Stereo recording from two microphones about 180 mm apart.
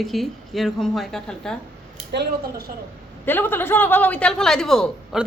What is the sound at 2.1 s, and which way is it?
Speech, 65° right (ahead or behind).